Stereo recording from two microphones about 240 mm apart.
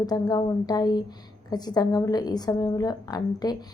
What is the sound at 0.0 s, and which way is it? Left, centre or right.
A woman's voice, centre.